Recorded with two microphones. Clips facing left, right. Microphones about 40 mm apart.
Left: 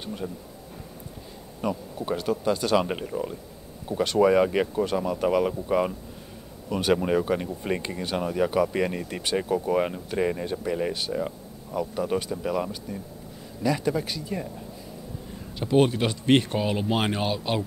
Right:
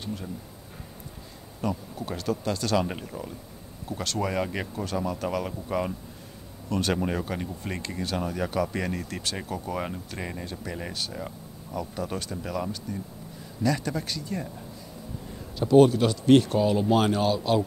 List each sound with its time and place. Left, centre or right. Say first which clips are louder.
0.0 s speech: left 2 dB; centre
1.6 s speech: left 2 dB; centre
15.6 s speech: right 4 dB; left